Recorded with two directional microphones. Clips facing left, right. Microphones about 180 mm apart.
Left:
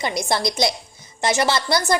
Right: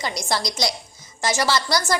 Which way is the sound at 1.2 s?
20° left (ahead or behind).